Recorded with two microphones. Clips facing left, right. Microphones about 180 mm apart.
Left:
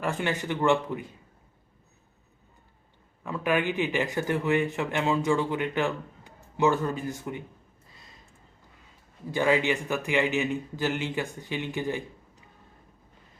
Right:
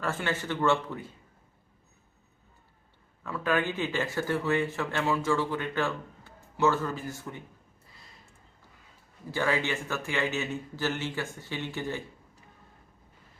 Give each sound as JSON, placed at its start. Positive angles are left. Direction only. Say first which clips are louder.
{"t": 0.0, "sound": "a man's voice", "louder": "left 2 dB", "side_deg": 15}
{"t": 3.2, "sound": "a man's voice", "louder": "left 2 dB", "side_deg": 15}
{"t": 9.3, "sound": "a man's voice", "louder": "left 5 dB", "side_deg": 15}